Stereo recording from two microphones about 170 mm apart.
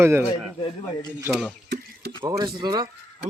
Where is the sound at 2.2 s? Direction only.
20° right (ahead or behind).